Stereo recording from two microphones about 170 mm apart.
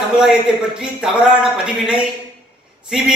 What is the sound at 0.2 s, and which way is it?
A man's voice, 5° right (ahead or behind).